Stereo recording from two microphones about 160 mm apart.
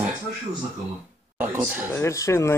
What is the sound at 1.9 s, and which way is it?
Speech, 20° left (ahead or behind).